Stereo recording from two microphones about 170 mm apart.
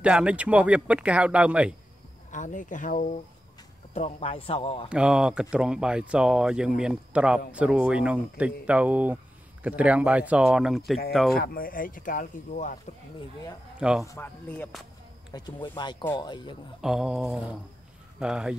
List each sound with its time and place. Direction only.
0.0 s a man's voice: 5° right (ahead or behind)
2.3 s speech: 50° left (ahead or behind)
3.9 s speech: 35° left (ahead or behind)
4.8 s a man's voice: 5° right (ahead or behind)
11.3 s speech: 60° left (ahead or behind)
13.7 s speech: 5° right (ahead or behind)
14.0 s speech: 15° left (ahead or behind)
15.3 s speech: 25° left (ahead or behind)
16.8 s speech: 5° right (ahead or behind)